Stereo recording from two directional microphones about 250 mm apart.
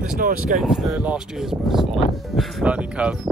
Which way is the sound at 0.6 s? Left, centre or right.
Centre.